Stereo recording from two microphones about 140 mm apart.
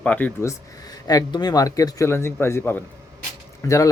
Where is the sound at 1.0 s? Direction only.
30° left (ahead or behind).